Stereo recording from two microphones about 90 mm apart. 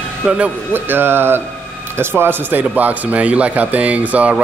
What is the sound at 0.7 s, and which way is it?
Speech, 25° right (ahead or behind).